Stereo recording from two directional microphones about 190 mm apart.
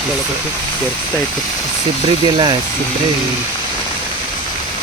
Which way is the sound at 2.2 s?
25° right (ahead or behind).